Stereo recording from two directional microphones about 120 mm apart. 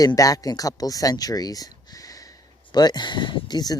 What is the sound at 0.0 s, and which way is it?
Speech, 30° left (ahead or behind).